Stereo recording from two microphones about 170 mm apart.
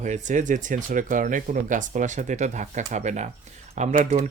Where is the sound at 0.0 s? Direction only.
45° right (ahead or behind).